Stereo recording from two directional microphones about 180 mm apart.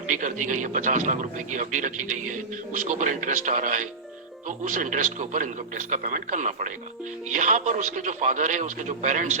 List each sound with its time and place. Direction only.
0.1 s a man's voice: 45° right (ahead or behind)